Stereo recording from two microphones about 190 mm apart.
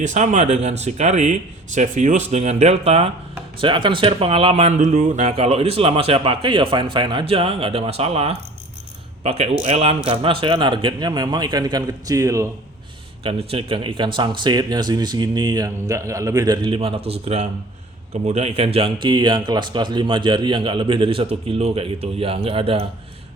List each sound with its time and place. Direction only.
0.0 s a man's voice: 40° right (ahead or behind); by 12.5 s 15° right (ahead or behind)
13.2 s speech: 30° right (ahead or behind)